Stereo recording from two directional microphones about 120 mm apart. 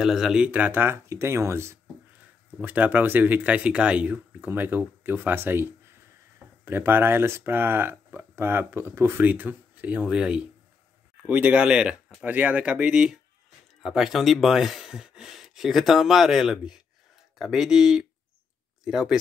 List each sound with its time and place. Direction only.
0.0 s speech: 5° right (ahead or behind)